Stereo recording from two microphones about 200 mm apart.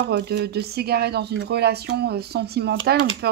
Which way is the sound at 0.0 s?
55° right (ahead or behind).